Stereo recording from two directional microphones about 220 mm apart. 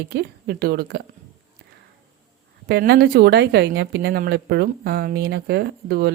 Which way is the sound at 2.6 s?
50° right (ahead or behind).